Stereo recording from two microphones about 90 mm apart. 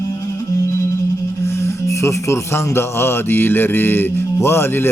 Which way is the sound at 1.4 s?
30° left (ahead or behind).